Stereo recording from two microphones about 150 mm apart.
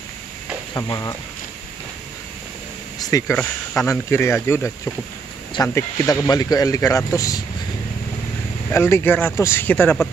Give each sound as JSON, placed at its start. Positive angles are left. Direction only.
{"t": 0.7, "sound": "speech", "side_deg": 25}
{"t": 3.0, "sound": "speech", "side_deg": 20}
{"t": 8.7, "sound": "speech", "side_deg": 15}